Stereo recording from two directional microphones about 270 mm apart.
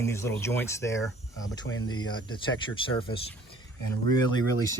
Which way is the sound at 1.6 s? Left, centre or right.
Left.